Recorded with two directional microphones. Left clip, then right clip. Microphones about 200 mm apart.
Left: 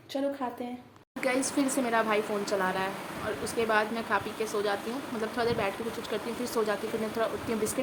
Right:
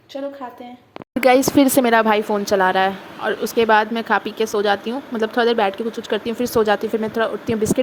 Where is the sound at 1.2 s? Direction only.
45° right (ahead or behind).